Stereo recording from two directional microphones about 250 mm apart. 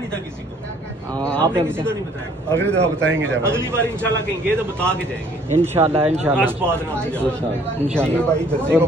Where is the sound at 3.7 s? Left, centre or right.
Centre.